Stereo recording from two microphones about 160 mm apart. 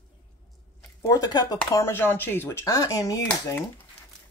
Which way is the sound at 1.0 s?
20° left (ahead or behind).